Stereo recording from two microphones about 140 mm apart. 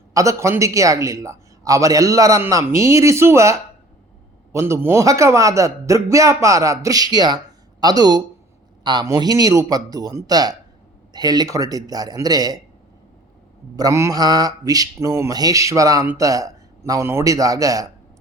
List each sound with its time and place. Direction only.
0.1 s a man's voice: 25° right (ahead or behind)
4.5 s a man's voice: 20° right (ahead or behind)
13.7 s a man's voice: 25° right (ahead or behind)